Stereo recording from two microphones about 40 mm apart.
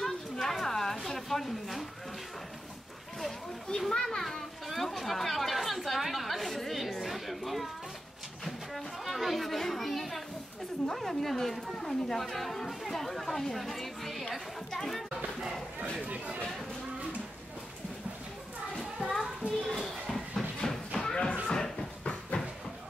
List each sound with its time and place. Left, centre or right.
0.0 s a sound: centre
3.9 s children playing: centre
4.2 s children playing: centre
8.5 s chatter: centre
11.0 s speech: centre
18.9 s children playing: centre
19.4 s children playing: right
20.1 s a sound: centre
22.3 s train: centre